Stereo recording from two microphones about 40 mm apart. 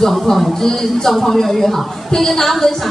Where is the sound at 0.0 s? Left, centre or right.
Centre.